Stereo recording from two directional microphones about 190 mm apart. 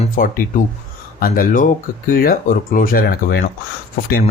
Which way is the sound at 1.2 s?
45° left (ahead or behind).